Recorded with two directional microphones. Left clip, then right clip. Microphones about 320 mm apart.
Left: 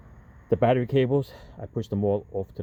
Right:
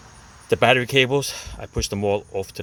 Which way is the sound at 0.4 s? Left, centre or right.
Centre.